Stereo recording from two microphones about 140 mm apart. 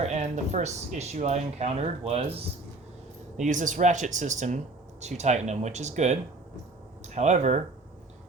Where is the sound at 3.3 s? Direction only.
65° right (ahead or behind).